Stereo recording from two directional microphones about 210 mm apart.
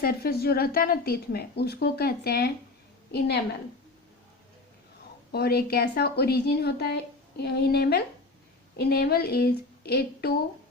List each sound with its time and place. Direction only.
0.0 s a woman's voice: 45° left (ahead or behind)
5.3 s a woman's voice: 50° left (ahead or behind)